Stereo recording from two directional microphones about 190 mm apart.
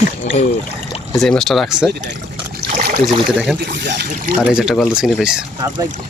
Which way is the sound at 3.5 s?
65° right (ahead or behind).